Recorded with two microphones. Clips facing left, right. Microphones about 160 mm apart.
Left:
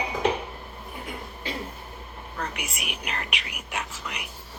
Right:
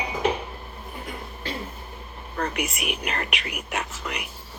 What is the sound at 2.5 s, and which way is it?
Speech, 55° right (ahead or behind).